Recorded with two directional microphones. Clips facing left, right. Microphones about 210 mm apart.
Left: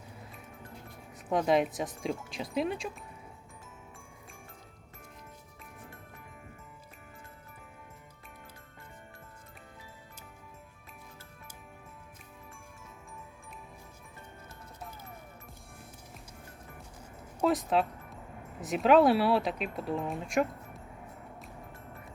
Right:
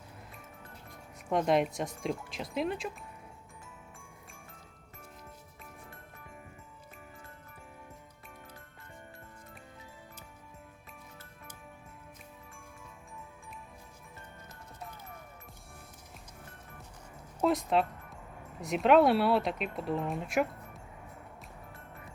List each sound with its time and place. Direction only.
1.3 s speech: centre (ahead or behind)
17.4 s music: centre (ahead or behind)
18.6 s speech: centre (ahead or behind)